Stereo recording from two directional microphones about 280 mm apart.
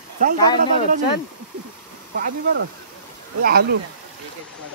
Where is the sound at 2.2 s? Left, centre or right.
Right.